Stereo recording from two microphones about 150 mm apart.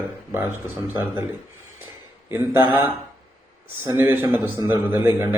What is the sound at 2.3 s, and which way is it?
A man's voice, 20° right (ahead or behind).